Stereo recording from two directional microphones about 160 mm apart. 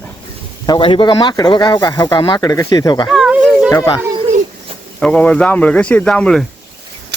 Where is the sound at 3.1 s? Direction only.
5° right (ahead or behind).